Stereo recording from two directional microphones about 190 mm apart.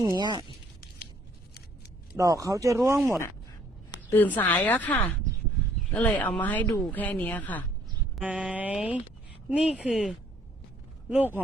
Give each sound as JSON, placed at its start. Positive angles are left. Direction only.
{"t": 0.0, "sound": "speech", "side_deg": -20}
{"t": 2.1, "sound": "speech", "side_deg": -15}
{"t": 4.1, "sound": "a woman's voice", "side_deg": 10}
{"t": 8.1, "sound": "speech", "side_deg": -5}